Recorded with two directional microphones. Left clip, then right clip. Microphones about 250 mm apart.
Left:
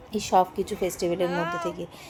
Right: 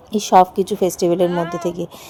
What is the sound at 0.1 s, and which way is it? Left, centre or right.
A woman's voice, right.